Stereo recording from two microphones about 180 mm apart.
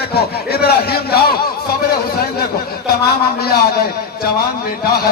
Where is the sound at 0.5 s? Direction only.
60° left (ahead or behind).